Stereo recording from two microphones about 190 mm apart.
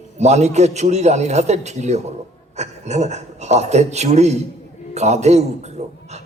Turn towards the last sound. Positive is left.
turn(degrees=-35)  # may be behind; listen again after turning